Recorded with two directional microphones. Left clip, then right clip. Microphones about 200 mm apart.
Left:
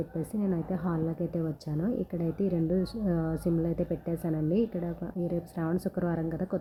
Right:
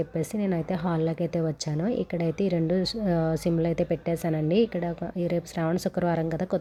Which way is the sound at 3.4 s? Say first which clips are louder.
Right 4 dB; 20° right (ahead or behind).